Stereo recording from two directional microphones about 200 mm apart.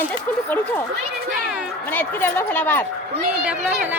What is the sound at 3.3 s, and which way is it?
Speech, 5° right (ahead or behind).